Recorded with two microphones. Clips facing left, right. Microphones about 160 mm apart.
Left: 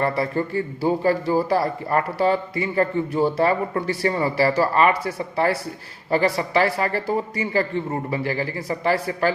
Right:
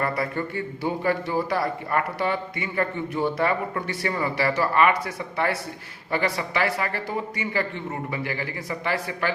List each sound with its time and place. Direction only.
0.0 s a man's voice: 30° left (ahead or behind)